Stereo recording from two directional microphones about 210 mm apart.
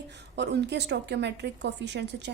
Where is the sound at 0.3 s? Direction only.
55° right (ahead or behind).